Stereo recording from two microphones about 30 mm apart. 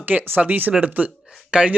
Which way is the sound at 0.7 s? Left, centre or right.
Right.